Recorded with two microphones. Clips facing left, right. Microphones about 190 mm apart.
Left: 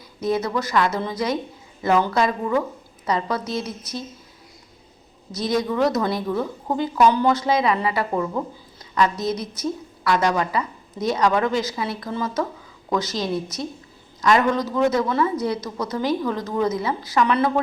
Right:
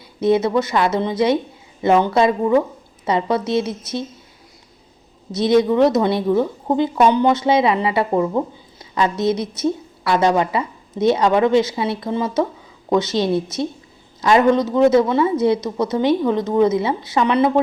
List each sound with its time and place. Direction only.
0.2 s speech: 25° right (ahead or behind)
5.3 s speech: 25° right (ahead or behind)